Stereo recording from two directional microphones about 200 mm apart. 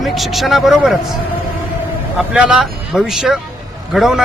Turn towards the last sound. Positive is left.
turn(degrees=0)  # may be behind; listen again after turning